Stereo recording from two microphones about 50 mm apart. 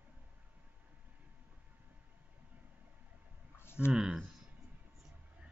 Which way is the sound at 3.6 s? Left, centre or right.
Left.